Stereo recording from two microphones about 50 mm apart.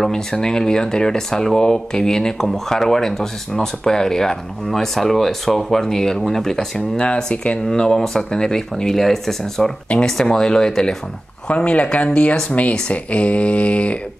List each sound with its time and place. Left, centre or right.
0.0 s speech: centre